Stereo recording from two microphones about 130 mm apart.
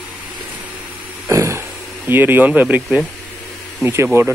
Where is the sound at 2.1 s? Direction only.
15° right (ahead or behind).